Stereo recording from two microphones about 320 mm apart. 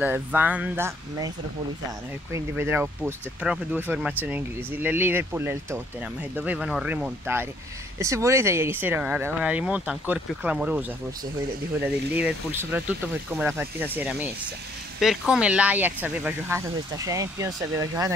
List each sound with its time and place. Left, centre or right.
0.0 s speech: centre
2.3 s speech: centre